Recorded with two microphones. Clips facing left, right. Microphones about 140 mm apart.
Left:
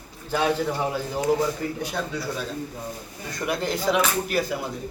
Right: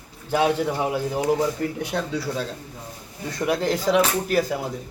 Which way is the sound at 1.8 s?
70° right (ahead or behind).